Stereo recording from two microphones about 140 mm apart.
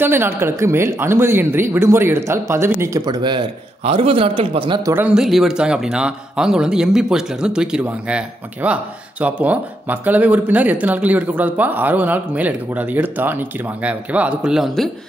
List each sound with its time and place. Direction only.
0.0 s speech: 15° right (ahead or behind)
3.1 s a man's voice: 35° right (ahead or behind)
4.8 s speech: 15° right (ahead or behind)
5.1 s speech: 5° right (ahead or behind)